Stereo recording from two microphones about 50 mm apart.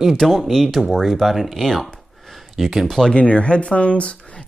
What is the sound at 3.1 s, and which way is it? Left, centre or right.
Speech, left.